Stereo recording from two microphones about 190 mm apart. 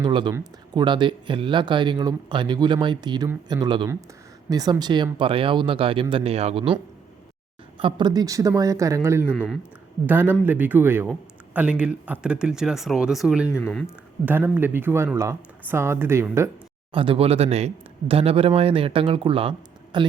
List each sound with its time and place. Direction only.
0.0 s speech: 25° right (ahead or behind)
7.8 s speech: 25° right (ahead or behind)
9.3 s speech: 5° left (ahead or behind)
10.1 s speech: 10° right (ahead or behind)
13.6 s speech: 10° left (ahead or behind)
14.3 s speech: 10° right (ahead or behind)
16.9 s speech: 25° right (ahead or behind)